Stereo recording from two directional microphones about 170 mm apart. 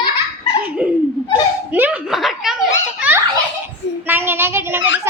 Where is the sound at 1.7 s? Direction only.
10° right (ahead or behind).